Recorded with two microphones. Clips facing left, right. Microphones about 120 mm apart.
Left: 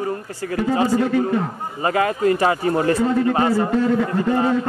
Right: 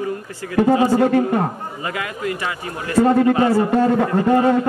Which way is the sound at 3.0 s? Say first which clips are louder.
Right 4 dB; 50° right (ahead or behind).